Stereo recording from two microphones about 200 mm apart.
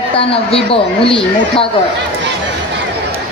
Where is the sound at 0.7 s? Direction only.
25° left (ahead or behind).